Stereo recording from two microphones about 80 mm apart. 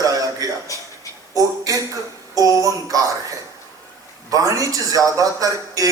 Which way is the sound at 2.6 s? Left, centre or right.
Right.